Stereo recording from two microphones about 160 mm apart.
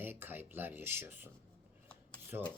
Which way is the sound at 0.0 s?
10° right (ahead or behind).